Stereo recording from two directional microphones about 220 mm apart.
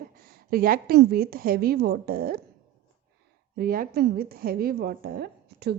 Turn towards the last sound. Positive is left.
turn(degrees=-45)  # may be behind; listen again after turning